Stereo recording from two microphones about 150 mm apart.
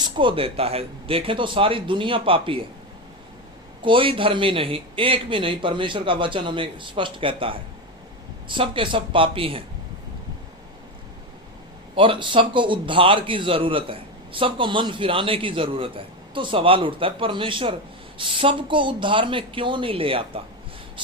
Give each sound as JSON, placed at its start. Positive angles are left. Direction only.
{"t": 0.0, "sound": "a man's voice", "side_deg": -35}
{"t": 3.8, "sound": "a man's voice", "side_deg": -35}
{"t": 11.9, "sound": "a man's voice", "side_deg": -35}